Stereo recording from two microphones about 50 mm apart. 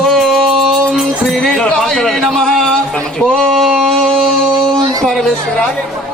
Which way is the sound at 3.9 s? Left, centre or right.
Centre.